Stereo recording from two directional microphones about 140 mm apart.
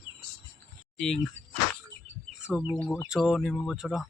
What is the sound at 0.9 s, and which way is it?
Speech, 5° left (ahead or behind).